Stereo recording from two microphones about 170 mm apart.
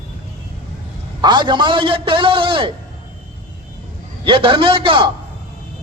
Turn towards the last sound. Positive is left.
turn(degrees=-30)  # may be behind; listen again after turning